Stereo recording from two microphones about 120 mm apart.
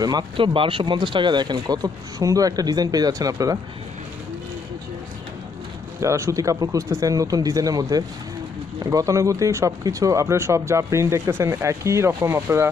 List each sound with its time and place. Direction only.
0.0 s speech: 40° right (ahead or behind)
5.9 s speech: 25° right (ahead or behind)